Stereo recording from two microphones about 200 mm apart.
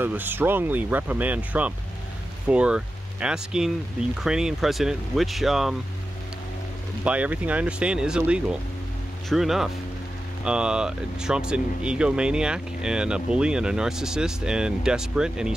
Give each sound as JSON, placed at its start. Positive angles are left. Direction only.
{"t": 0.0, "sound": "speech", "side_deg": -10}
{"t": 7.1, "sound": "speech", "side_deg": -5}